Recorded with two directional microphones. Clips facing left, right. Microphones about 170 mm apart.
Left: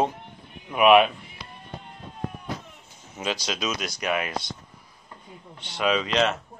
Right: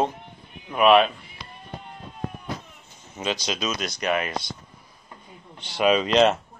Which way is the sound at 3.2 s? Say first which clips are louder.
Right 1 dB; 5° left (ahead or behind).